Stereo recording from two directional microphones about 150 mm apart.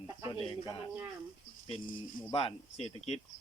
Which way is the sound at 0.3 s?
35° left (ahead or behind).